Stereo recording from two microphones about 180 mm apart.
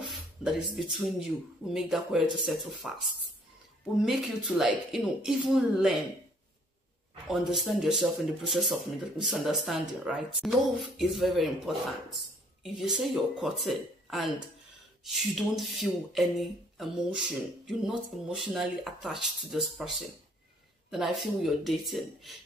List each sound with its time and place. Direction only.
0.0 s music: centre (ahead or behind)
1.7 s speech: centre (ahead or behind)
4.0 s speech: centre (ahead or behind)
7.2 s speech: centre (ahead or behind)
20.9 s speech: centre (ahead or behind)